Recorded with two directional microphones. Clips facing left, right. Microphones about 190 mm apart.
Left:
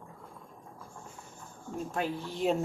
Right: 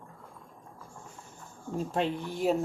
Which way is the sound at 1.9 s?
25° right (ahead or behind).